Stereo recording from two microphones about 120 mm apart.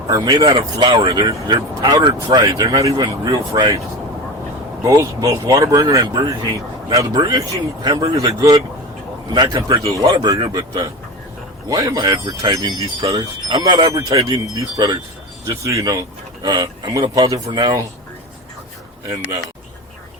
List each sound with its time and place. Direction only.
0.1 s speech: 35° right (ahead or behind)
0.9 s speech: 30° right (ahead or behind)
1.9 s speech: 40° right (ahead or behind)
4.8 s speech: 25° right (ahead or behind)